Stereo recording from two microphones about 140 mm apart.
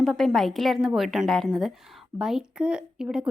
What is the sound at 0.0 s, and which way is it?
A woman's voice, centre (ahead or behind).